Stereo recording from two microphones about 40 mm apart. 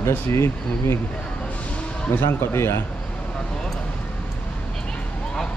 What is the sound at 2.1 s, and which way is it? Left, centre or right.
Speech, left.